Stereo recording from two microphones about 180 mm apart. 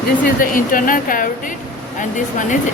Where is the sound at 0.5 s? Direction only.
50° left (ahead or behind).